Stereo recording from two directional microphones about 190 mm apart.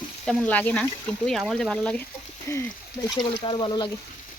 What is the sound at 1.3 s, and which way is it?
Speech, centre (ahead or behind).